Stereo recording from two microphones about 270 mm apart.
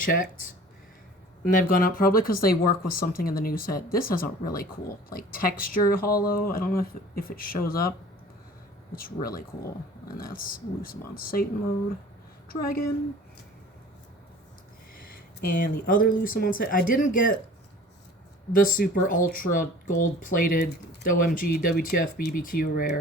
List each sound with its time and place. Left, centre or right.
0.0 s speech: left
1.5 s speech: left
9.0 s speech: left
12.5 s a woman's voice: left
14.9 s speech: left
18.5 s speech: left